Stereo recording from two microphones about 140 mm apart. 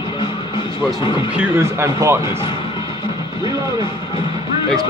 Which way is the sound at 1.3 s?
15° right (ahead or behind).